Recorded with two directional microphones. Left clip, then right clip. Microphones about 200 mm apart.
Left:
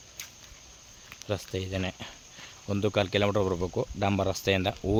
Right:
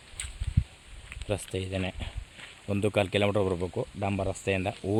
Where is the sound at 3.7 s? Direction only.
20° left (ahead or behind).